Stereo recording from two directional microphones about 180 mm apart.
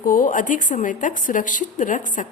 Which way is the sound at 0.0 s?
50° left (ahead or behind).